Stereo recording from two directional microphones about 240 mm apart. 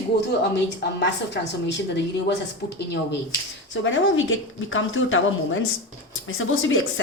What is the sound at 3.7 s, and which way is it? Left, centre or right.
A woman's voice, left.